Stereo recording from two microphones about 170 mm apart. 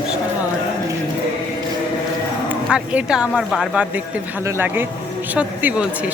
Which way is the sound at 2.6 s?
5° right (ahead or behind).